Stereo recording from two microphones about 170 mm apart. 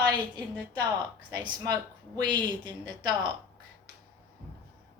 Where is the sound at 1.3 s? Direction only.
25° right (ahead or behind).